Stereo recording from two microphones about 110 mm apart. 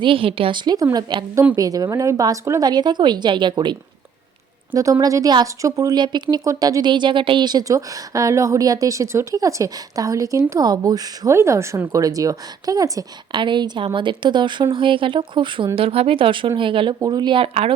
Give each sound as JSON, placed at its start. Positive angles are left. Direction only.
{"t": 0.0, "sound": "a woman's voice", "side_deg": -55}
{"t": 2.6, "sound": "a woman's voice", "side_deg": -40}
{"t": 4.7, "sound": "speech", "side_deg": -30}
{"t": 13.4, "sound": "a woman's voice", "side_deg": -45}